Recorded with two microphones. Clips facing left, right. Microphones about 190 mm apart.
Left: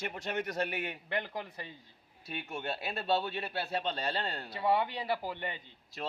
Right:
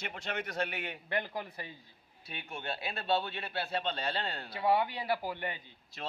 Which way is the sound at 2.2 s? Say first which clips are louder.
Left 3 dB; 45° left (ahead or behind).